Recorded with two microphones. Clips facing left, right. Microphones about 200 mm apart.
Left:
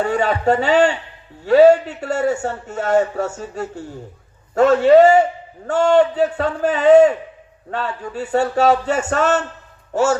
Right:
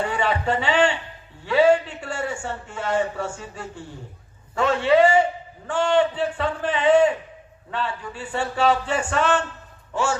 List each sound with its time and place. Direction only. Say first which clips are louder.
0.0 s a man's voice: left 6 dB; 45° left (ahead or behind)